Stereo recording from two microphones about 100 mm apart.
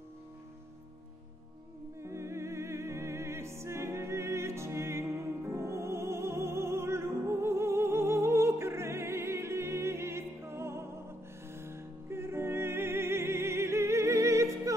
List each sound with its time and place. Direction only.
2.0 s music: 30° right (ahead or behind)